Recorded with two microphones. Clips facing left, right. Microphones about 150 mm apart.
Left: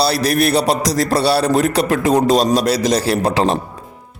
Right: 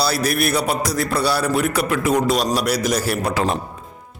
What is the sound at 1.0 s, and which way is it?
A man's voice, 35° left (ahead or behind).